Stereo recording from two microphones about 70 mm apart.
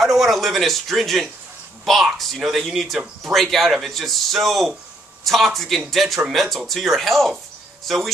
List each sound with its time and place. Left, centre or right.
0.0 s speech: centre